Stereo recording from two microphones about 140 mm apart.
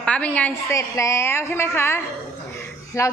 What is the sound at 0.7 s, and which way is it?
A woman's voice, 20° left (ahead or behind).